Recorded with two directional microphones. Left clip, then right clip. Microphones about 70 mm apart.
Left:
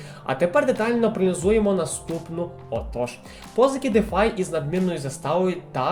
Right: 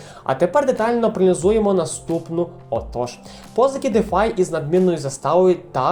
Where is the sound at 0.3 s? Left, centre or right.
Right.